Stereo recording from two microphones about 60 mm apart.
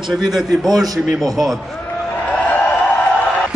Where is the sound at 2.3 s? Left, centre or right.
Left.